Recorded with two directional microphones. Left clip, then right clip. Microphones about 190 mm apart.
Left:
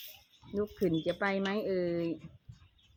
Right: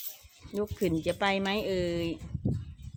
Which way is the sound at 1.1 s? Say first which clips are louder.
Right 4 dB; 30° right (ahead or behind).